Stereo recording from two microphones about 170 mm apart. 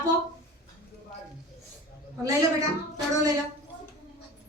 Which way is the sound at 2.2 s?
20° right (ahead or behind).